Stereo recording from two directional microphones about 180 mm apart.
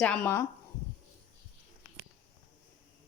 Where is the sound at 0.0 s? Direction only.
5° left (ahead or behind).